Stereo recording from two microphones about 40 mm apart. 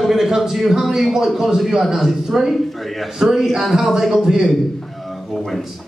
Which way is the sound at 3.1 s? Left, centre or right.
Centre.